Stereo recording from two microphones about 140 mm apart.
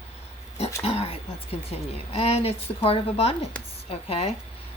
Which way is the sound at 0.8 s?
45° left (ahead or behind).